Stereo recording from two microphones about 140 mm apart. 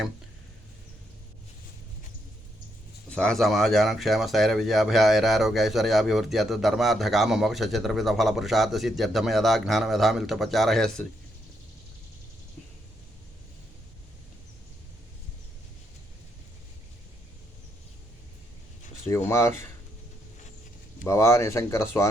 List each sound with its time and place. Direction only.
3.1 s speech: 5° left (ahead or behind)
19.3 s speech: 20° left (ahead or behind)
21.0 s speech: 20° left (ahead or behind)